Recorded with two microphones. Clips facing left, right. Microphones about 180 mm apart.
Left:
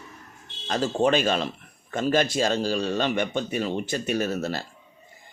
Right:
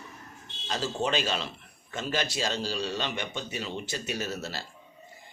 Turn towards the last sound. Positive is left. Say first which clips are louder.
# left 8 dB
turn(degrees=55)  # may be behind; listen again after turning